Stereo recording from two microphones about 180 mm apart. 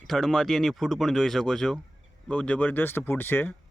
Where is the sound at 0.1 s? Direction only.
Centre (ahead or behind).